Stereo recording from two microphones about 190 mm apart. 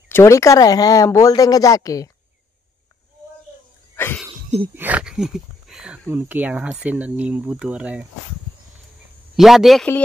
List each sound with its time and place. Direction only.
0.1 s speech: 15° left (ahead or behind)
3.9 s cough: 10° left (ahead or behind)
4.7 s speech: 10° right (ahead or behind)
9.4 s a man's voice: centre (ahead or behind)